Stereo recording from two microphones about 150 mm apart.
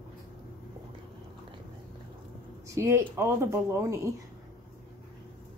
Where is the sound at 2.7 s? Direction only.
20° right (ahead or behind).